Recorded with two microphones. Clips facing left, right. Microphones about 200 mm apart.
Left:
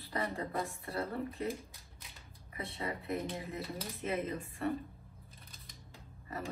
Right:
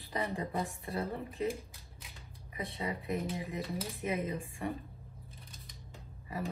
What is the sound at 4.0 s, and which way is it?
Speech, 15° right (ahead or behind).